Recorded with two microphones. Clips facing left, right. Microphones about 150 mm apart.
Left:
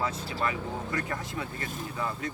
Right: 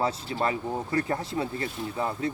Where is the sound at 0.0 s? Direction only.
35° right (ahead or behind).